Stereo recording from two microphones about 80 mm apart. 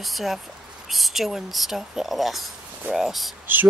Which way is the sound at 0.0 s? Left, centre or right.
Centre.